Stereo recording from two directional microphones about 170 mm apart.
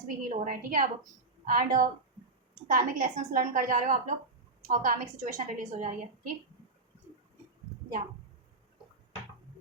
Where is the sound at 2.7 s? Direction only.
55° right (ahead or behind).